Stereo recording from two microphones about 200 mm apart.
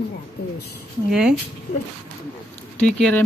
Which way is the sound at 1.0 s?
5° right (ahead or behind).